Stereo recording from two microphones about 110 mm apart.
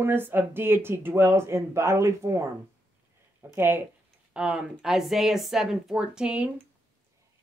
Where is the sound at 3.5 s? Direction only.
20° right (ahead or behind).